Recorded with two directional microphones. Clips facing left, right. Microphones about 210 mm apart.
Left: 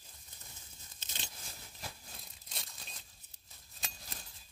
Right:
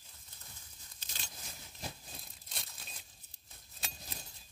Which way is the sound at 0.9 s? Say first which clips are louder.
Left 3 dB; 20° left (ahead or behind).